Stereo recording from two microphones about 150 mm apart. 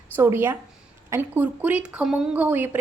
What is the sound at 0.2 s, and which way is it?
A woman's voice, 15° right (ahead or behind).